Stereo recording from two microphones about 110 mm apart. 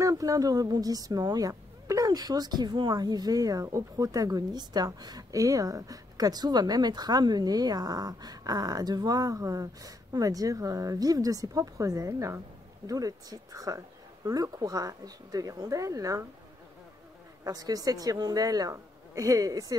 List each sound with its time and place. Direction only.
0.0 s speech: 30° right (ahead or behind)
17.5 s speech: 35° right (ahead or behind)